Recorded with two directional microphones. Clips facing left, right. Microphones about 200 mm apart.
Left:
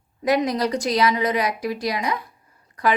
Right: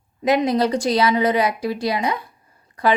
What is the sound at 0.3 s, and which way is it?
A woman's voice, 25° right (ahead or behind).